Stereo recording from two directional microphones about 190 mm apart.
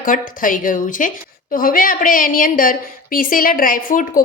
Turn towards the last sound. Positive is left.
turn(degrees=45)  # may be behind; listen again after turning